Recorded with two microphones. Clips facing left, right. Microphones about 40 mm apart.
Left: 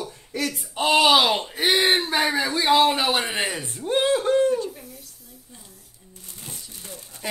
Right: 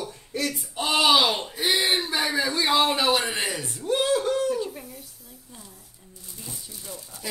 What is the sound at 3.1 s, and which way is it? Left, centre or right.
A man's voice, left.